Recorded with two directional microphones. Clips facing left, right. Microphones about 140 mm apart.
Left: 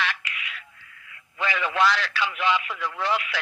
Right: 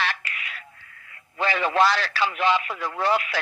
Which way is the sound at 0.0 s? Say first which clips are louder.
Right 1 dB; 35° right (ahead or behind).